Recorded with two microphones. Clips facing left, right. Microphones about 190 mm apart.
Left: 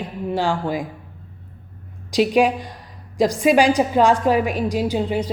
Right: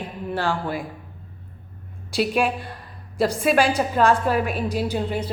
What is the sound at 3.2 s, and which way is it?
Speech, 15° left (ahead or behind).